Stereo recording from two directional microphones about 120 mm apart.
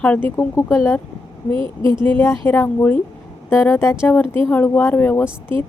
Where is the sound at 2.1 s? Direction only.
15° left (ahead or behind).